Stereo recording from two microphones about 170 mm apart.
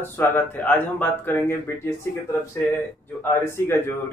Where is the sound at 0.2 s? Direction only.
10° left (ahead or behind).